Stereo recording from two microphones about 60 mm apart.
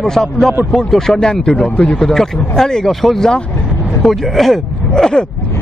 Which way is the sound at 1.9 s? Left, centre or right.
Centre.